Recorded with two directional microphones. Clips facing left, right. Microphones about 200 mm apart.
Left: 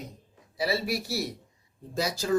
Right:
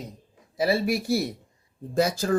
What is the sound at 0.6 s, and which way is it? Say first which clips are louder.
Speech: right 5 dB; 50° right (ahead or behind).